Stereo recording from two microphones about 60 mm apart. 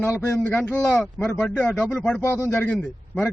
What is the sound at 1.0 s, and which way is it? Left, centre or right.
Speech, centre.